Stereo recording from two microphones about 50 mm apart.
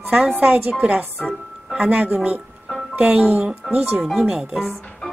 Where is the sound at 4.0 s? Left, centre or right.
Centre.